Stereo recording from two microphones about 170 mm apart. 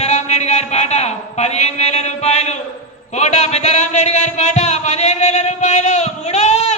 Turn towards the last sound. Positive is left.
turn(degrees=40)  # may be behind; listen again after turning